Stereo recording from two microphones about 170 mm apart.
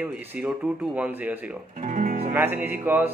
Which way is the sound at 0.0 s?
10° right (ahead or behind).